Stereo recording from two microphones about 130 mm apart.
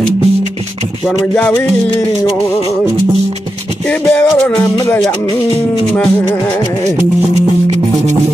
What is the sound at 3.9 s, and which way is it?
Music, 10° left (ahead or behind).